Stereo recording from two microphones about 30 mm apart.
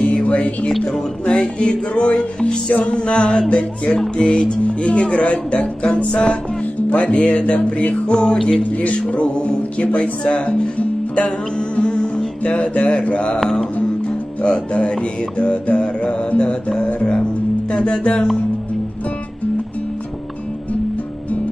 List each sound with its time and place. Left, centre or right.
0.0 s music: left
1.2 s music: left
7.0 s music: left
8.1 s music: left
8.6 s speech: left
9.1 s music: left
9.6 s speech: left
11.5 s music: left
13.4 s music: centre
14.0 s music: left